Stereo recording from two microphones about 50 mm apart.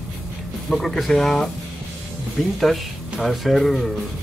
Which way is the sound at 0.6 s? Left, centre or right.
Centre.